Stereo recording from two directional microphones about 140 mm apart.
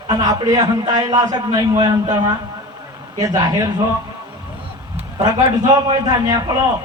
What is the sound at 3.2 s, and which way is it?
Speech, 25° right (ahead or behind).